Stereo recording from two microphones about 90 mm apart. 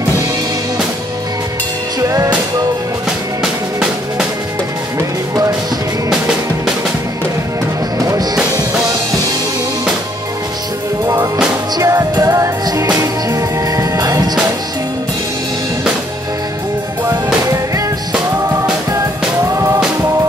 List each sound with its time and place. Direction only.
2.0 s music: 40° right (ahead or behind)
8.1 s music: 45° right (ahead or behind)
11.8 s music: 40° right (ahead or behind)
19.5 s music: 35° right (ahead or behind)